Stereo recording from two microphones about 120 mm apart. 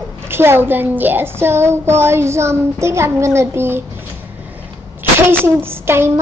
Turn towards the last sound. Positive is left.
turn(degrees=-20)  # may be behind; listen again after turning